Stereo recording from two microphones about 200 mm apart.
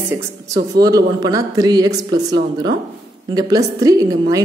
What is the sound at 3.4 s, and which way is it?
Speech, 20° right (ahead or behind).